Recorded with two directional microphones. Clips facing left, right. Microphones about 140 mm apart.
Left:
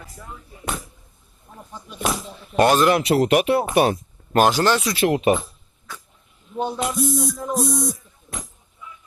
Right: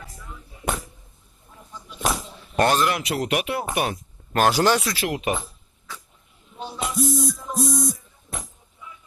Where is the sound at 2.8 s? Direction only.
30° left (ahead or behind).